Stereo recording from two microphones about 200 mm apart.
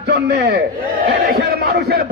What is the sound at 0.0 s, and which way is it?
Speech, 60° right (ahead or behind).